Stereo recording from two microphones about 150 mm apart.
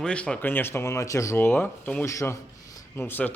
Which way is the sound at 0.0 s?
5° left (ahead or behind).